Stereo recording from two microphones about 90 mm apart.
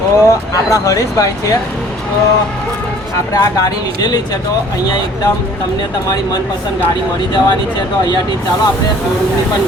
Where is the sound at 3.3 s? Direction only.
45° left (ahead or behind).